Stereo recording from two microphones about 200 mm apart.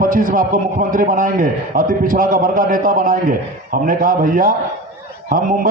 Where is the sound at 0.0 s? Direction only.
45° right (ahead or behind).